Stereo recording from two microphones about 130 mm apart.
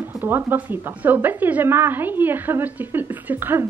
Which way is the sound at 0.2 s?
15° right (ahead or behind).